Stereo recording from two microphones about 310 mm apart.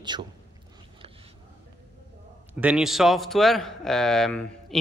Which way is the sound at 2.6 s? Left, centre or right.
Centre.